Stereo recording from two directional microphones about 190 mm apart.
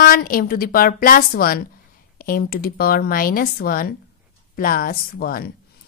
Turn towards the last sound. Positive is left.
turn(degrees=50)  # may be behind; listen again after turning